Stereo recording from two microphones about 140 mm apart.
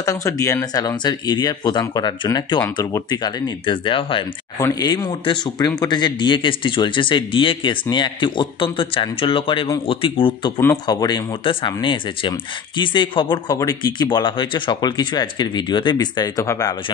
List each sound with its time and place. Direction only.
0.0 s speech: 25° left (ahead or behind)
4.6 s speech: 25° left (ahead or behind)
10.9 s speech: 30° left (ahead or behind)